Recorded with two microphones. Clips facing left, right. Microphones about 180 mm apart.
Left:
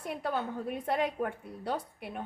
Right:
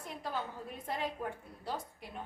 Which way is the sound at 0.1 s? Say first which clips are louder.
Left 6 dB; 60° left (ahead or behind).